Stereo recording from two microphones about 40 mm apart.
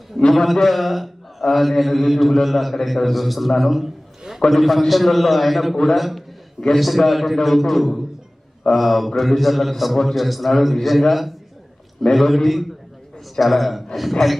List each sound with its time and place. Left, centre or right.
0.3 s a man's voice: centre